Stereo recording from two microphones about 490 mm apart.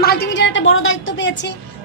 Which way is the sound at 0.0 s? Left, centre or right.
Centre.